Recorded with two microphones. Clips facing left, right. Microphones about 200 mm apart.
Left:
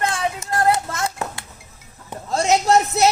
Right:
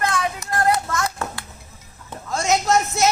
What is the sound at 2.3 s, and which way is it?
Speech, 35° left (ahead or behind).